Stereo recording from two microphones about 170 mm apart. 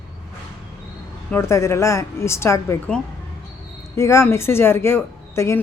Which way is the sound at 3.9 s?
15° left (ahead or behind).